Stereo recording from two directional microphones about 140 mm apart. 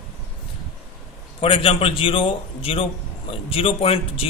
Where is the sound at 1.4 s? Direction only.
40° left (ahead or behind).